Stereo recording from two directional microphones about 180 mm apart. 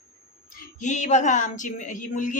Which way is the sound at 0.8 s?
40° left (ahead or behind).